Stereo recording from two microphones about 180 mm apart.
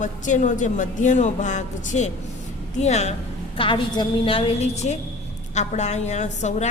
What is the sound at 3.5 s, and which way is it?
A woman's voice, 30° left (ahead or behind).